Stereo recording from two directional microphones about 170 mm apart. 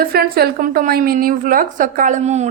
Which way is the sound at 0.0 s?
65° right (ahead or behind).